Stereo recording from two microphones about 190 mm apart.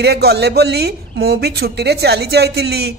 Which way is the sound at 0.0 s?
60° right (ahead or behind).